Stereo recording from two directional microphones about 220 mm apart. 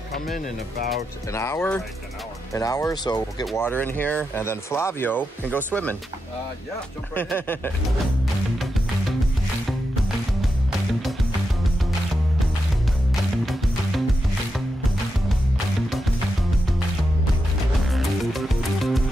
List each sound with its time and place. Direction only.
1.3 s speech: 10° left (ahead or behind)
7.2 s speech: 10° left (ahead or behind)
13.1 s music: centre (ahead or behind)
17.9 s music: centre (ahead or behind)